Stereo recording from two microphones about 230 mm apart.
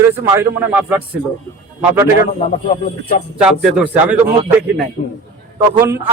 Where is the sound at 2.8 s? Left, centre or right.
Left.